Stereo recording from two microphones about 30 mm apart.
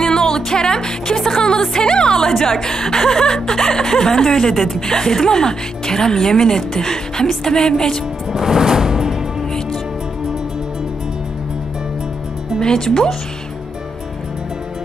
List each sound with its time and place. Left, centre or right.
0.0 s music: centre
2.3 s a woman's voice: centre
8.3 s music: centre
12.5 s speech: left